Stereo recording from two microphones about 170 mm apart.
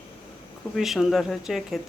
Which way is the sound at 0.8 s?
Centre (ahead or behind).